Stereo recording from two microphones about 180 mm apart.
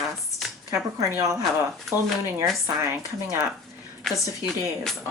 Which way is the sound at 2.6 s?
15° right (ahead or behind).